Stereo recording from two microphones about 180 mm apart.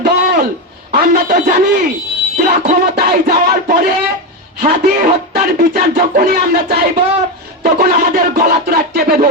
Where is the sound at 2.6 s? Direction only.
60° right (ahead or behind).